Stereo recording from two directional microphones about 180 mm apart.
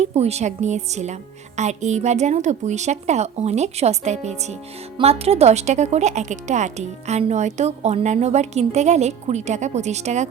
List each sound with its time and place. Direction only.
0.0 s speech: 35° right (ahead or behind)